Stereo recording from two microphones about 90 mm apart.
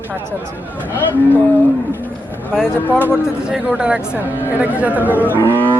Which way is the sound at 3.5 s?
10° right (ahead or behind).